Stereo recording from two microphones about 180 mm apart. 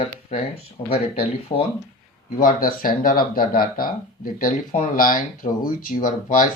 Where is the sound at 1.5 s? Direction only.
25° left (ahead or behind).